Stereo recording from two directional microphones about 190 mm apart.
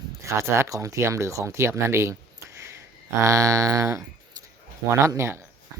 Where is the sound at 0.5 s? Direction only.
15° right (ahead or behind).